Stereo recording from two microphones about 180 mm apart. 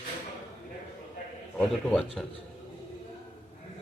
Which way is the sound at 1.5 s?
5° left (ahead or behind).